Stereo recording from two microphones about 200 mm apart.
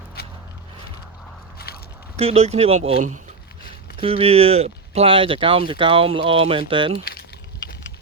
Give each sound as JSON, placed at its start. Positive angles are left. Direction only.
{"t": 0.2, "sound": "biting", "side_deg": 50}
{"t": 1.5, "sound": "a sound", "side_deg": 50}
{"t": 2.1, "sound": "speech", "side_deg": -30}